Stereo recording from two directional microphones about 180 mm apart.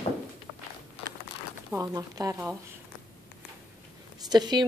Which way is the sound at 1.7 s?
20° right (ahead or behind).